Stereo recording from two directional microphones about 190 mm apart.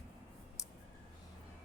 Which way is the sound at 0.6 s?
15° left (ahead or behind).